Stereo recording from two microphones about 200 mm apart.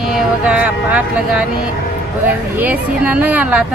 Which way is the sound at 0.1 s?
5° right (ahead or behind).